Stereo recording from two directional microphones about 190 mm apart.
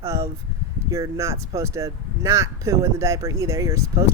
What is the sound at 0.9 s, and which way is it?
Speech, 15° right (ahead or behind).